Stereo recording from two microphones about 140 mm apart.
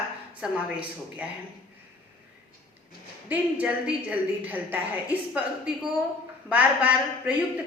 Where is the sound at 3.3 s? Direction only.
10° right (ahead or behind).